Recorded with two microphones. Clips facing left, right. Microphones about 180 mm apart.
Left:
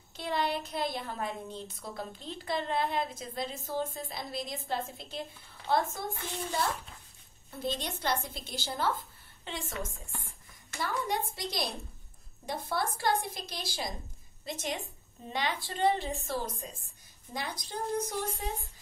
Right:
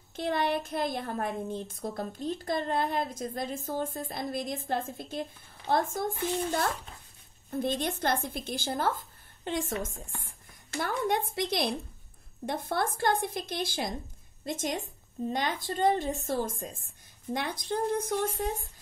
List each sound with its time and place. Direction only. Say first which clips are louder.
0.1 s a woman's voice: right 3 dB; 50° right (ahead or behind)
10.8 s a woman's voice: right 4 dB; 55° right (ahead or behind)